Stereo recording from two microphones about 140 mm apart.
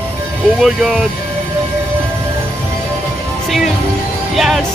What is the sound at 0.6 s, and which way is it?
Speech, 5° right (ahead or behind).